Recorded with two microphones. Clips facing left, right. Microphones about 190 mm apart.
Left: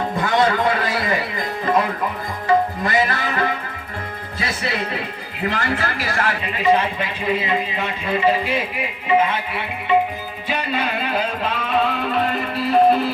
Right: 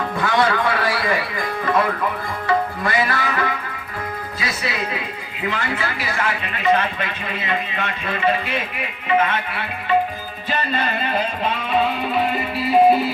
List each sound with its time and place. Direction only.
0.3 s music: 20° left (ahead or behind)
2.5 s tabla: 20° left (ahead or behind)
3.2 s speech: 40° left (ahead or behind)
5.4 s speech: 40° left (ahead or behind)
6.4 s speech: 30° left (ahead or behind)
10.5 s music: 10° left (ahead or behind)